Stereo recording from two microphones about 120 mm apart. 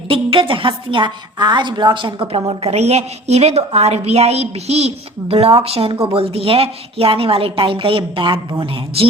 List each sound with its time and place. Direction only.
0.1 s a woman's voice: 45° right (ahead or behind)